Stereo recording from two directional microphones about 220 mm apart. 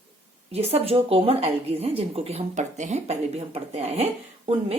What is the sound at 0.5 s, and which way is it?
A woman's voice, 30° right (ahead or behind).